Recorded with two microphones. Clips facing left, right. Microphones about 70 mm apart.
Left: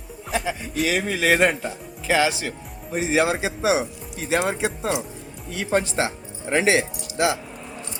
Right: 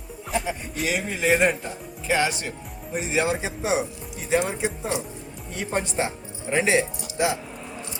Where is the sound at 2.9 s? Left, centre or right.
Left.